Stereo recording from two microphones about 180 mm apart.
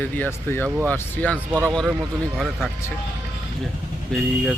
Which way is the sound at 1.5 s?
20° right (ahead or behind).